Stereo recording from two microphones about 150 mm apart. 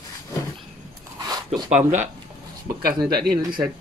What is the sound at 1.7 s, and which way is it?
Speech, 50° right (ahead or behind).